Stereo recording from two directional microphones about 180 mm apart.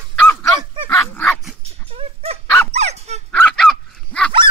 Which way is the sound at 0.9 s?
15° left (ahead or behind).